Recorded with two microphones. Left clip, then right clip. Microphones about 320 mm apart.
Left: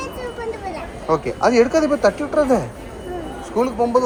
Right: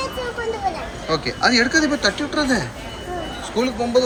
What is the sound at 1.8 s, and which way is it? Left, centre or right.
Speech, centre.